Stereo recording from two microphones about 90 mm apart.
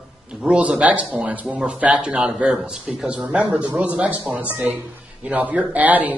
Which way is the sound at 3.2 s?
20° right (ahead or behind).